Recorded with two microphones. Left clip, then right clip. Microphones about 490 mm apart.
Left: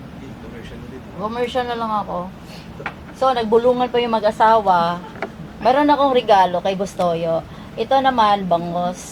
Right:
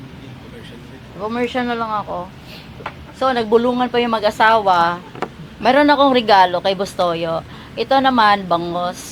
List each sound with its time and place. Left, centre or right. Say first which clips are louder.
1.3 s a woman's voice: right 1 dB; right
3.2 s a woman's voice: right 1 dB; right